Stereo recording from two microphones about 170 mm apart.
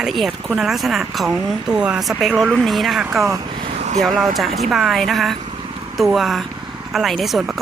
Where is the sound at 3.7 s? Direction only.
40° right (ahead or behind).